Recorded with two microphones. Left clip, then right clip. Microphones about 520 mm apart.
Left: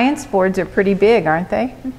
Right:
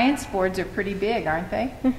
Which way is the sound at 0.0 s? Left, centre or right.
Left.